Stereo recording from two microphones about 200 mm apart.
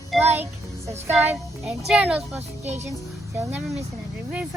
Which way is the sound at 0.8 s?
15° right (ahead or behind).